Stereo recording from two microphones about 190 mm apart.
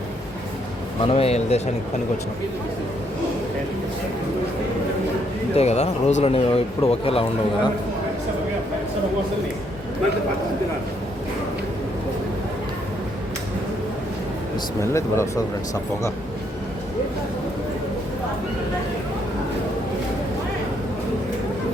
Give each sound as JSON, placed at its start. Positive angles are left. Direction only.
{"t": 1.1, "sound": "speech", "side_deg": 30}
{"t": 5.5, "sound": "speech", "side_deg": 35}
{"t": 14.8, "sound": "speech", "side_deg": 15}